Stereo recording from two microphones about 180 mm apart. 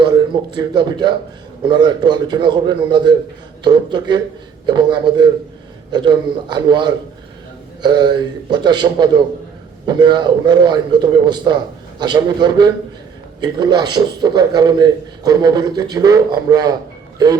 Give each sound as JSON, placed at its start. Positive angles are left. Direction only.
{"t": 0.0, "sound": "a man's voice", "side_deg": -25}